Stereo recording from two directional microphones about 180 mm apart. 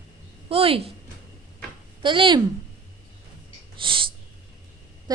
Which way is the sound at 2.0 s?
25° right (ahead or behind).